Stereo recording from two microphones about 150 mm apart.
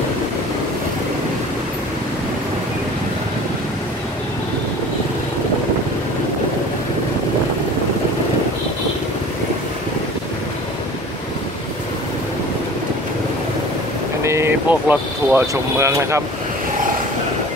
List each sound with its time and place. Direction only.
14.2 s speech: 15° right (ahead or behind)